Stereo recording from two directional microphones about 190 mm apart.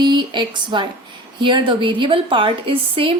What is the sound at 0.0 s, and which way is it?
A woman's voice, 25° right (ahead or behind).